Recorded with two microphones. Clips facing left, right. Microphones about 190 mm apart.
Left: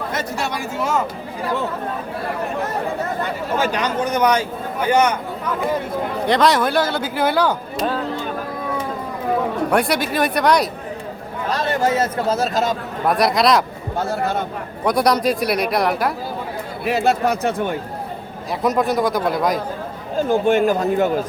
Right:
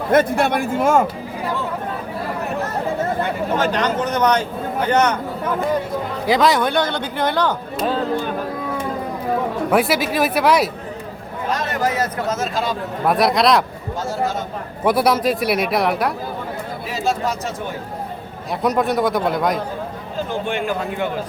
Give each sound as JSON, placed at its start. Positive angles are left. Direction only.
{"t": 0.1, "sound": "a man's voice", "side_deg": -55}
{"t": 3.6, "sound": "speech", "side_deg": 10}
{"t": 6.2, "sound": "speech", "side_deg": 0}
{"t": 9.6, "sound": "speech", "side_deg": -5}
{"t": 11.5, "sound": "speech", "side_deg": 30}
{"t": 13.1, "sound": "speech", "side_deg": 0}
{"t": 14.0, "sound": "speech", "side_deg": 60}
{"t": 14.8, "sound": "speech", "side_deg": -5}
{"t": 16.8, "sound": "speech", "side_deg": 60}
{"t": 18.6, "sound": "speech", "side_deg": 0}
{"t": 20.1, "sound": "a man's voice", "side_deg": 45}